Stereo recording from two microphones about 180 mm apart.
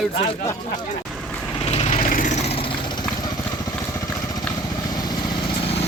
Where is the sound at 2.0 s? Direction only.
50° left (ahead or behind); by 3.0 s 25° left (ahead or behind).